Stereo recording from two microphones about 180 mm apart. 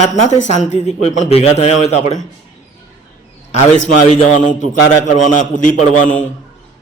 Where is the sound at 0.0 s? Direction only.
40° left (ahead or behind).